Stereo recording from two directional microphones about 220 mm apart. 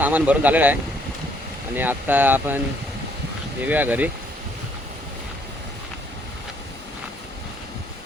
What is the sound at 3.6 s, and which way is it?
Speech, 10° right (ahead or behind).